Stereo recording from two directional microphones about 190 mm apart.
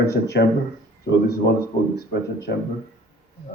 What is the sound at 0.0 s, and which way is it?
Speech, 60° left (ahead or behind).